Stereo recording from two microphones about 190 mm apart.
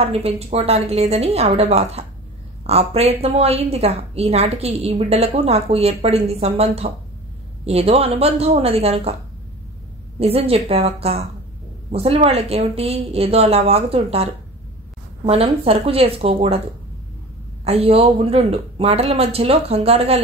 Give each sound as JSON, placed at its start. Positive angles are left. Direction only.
{"t": 0.0, "sound": "a woman's voice", "side_deg": -30}
{"t": 10.1, "sound": "a woman's voice", "side_deg": -30}
{"t": 17.6, "sound": "a woman's voice", "side_deg": -30}